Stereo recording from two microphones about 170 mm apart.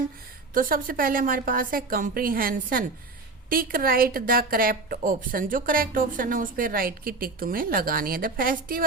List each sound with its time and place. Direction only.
0.5 s a woman's voice: 55° right (ahead or behind)